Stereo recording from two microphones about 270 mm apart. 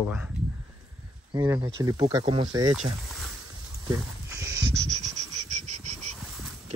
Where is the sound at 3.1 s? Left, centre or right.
Centre.